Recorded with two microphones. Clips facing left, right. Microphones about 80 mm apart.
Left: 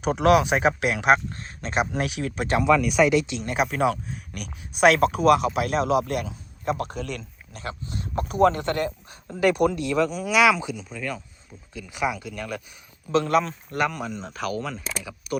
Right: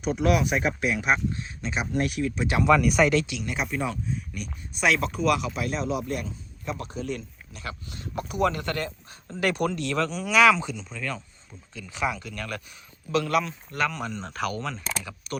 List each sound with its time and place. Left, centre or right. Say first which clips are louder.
0.0 s speech: left 5 dB; left
2.0 s speech: right 1 dB; left
2.6 s speech: left 1 dB; centre
3.2 s speech: left 2 dB; left
3.5 s a man's voice: left 7 dB; left
5.5 s a man's voice: left 6 dB; left
7.5 s speech: left 4 dB; left
8.6 s speech: left 5 dB; left
9.4 s speech: left 5 dB; centre
13.1 s speech: left 3 dB; left
14.0 s speech: even; centre